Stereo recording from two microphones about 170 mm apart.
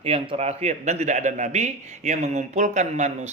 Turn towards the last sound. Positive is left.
turn(degrees=-45)  # may be behind; listen again after turning